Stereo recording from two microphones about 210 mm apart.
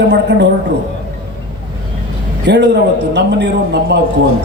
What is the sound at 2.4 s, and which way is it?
A man's voice, 55° right (ahead or behind).